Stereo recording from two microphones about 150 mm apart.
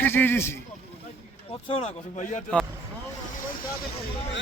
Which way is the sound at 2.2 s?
55° left (ahead or behind).